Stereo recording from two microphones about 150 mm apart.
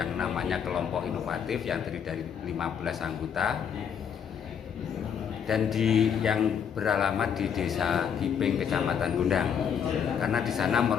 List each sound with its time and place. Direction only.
0.0 s a man's voice: centre (ahead or behind)
5.5 s a man's voice: centre (ahead or behind)